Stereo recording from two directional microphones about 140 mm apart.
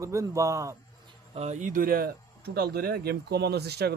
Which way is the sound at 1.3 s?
55° right (ahead or behind).